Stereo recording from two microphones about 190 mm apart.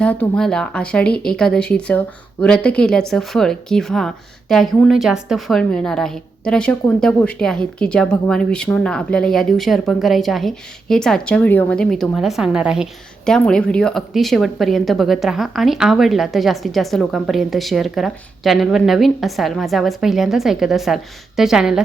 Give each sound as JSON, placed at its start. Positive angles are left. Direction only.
{"t": 0.0, "sound": "a woman's voice", "side_deg": 5}